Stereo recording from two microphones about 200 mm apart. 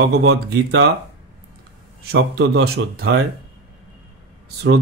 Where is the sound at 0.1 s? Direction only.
55° right (ahead or behind).